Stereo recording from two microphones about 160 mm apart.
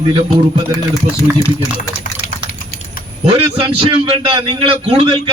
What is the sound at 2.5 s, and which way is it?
Typing, 75° left (ahead or behind).